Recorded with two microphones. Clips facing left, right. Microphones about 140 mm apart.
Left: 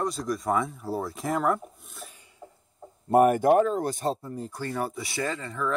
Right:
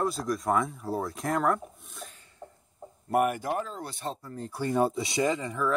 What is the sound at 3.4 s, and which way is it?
Speech, 60° left (ahead or behind).